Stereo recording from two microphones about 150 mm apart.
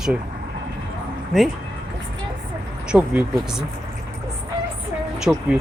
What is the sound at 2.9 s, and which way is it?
Speech, 10° right (ahead or behind).